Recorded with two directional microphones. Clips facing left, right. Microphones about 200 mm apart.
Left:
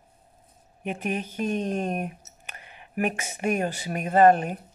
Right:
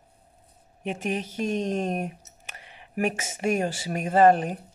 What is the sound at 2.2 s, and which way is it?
Speech, 30° right (ahead or behind).